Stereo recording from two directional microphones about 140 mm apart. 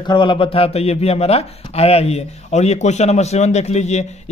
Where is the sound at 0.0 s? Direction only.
35° left (ahead or behind).